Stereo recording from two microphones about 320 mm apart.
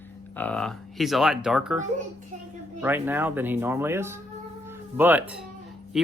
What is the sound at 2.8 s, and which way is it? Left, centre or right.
A man's voice, centre.